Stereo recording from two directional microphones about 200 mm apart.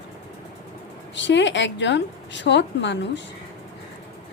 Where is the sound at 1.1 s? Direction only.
65° left (ahead or behind).